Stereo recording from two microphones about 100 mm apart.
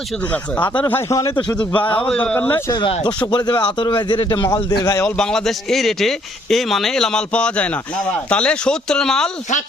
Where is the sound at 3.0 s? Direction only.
50° left (ahead or behind).